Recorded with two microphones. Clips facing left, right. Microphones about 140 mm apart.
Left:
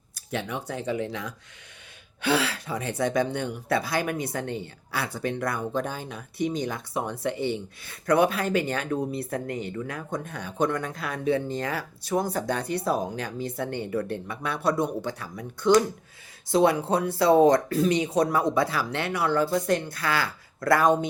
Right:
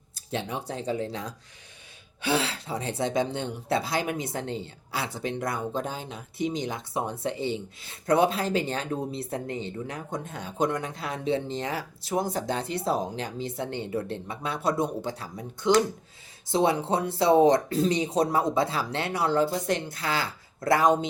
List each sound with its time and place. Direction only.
0.3 s speech: 25° right (ahead or behind)
2.4 s speech: 25° right (ahead or behind)